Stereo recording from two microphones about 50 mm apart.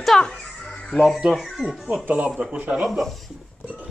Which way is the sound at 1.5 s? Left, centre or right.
Centre.